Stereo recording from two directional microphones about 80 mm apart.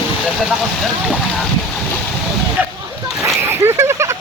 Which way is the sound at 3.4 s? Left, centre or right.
Right.